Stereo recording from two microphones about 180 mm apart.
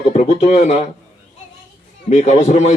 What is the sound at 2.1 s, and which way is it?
Speech, 40° left (ahead or behind).